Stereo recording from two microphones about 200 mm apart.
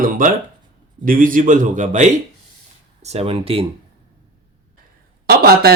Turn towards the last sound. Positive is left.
turn(degrees=-50)  # may be behind; listen again after turning